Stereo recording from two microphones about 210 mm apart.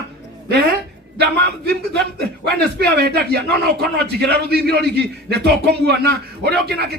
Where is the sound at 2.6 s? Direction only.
50° right (ahead or behind).